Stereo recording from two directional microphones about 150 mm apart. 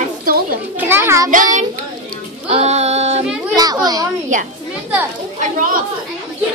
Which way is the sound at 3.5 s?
25° right (ahead or behind).